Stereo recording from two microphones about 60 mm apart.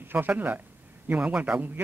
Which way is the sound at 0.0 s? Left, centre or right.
Right.